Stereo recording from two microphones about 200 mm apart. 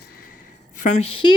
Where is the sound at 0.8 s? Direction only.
35° left (ahead or behind).